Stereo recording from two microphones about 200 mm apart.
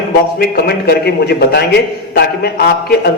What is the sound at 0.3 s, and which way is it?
A man's voice, 50° left (ahead or behind).